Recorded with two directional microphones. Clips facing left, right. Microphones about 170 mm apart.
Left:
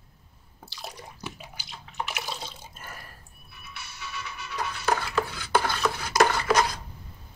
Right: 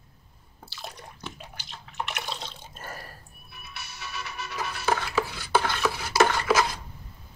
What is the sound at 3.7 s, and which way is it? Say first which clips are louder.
Music: even; 65° right (ahead or behind).